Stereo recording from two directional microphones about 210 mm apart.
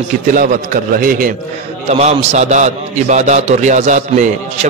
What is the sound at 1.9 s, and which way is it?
A man's voice, 30° right (ahead or behind).